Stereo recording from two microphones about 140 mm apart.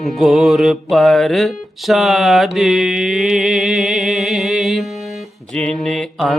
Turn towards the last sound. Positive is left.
turn(degrees=0)  # may be behind; listen again after turning